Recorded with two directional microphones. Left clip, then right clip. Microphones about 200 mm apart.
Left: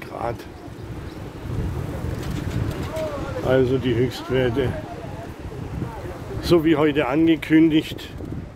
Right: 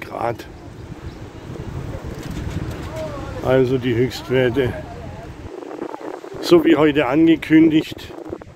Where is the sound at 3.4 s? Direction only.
20° right (ahead or behind).